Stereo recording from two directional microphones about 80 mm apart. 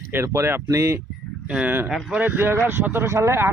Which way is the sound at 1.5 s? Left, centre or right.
Centre.